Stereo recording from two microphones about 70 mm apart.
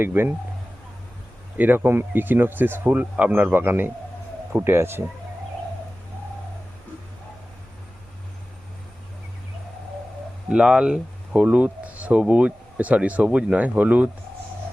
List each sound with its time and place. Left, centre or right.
0.0 s speech: right
1.5 s speech: right
10.5 s speech: centre